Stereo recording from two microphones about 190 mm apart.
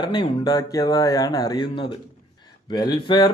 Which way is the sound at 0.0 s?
20° left (ahead or behind).